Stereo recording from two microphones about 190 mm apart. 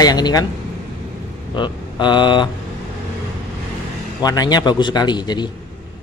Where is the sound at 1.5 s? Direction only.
25° left (ahead or behind).